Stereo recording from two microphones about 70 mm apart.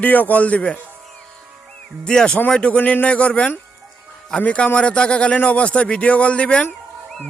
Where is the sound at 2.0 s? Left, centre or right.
Centre.